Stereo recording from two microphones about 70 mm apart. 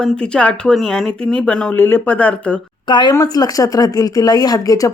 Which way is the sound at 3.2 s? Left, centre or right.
Left.